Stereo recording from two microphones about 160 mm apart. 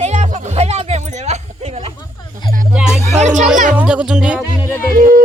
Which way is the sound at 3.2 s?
50° right (ahead or behind).